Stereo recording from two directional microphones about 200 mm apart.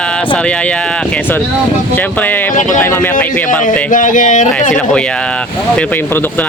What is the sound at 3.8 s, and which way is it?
Speech, 40° left (ahead or behind).